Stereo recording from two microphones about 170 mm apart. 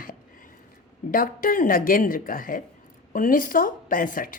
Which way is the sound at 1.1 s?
55° left (ahead or behind).